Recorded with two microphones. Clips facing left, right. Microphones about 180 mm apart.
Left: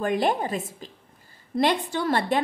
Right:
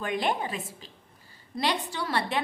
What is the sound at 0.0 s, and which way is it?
A woman's voice, 45° left (ahead or behind).